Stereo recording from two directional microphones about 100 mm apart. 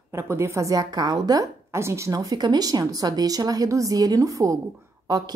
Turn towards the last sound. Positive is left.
turn(degrees=-40)  # may be behind; listen again after turning